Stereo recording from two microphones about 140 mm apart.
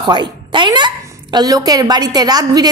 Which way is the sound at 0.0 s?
35° right (ahead or behind).